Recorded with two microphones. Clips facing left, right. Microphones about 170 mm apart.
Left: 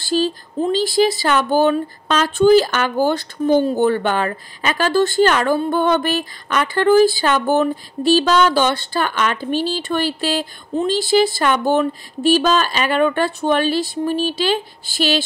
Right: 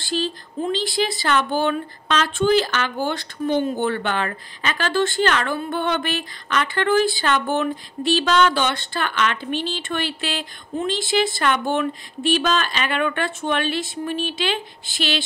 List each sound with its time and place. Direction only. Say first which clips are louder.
0.0 s speech: left 6 dB; 40° left (ahead or behind)